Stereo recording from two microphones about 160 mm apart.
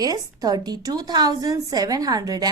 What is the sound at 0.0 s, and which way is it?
A woman's voice, 25° right (ahead or behind).